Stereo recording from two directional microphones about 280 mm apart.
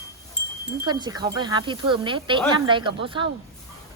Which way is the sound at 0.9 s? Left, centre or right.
Centre.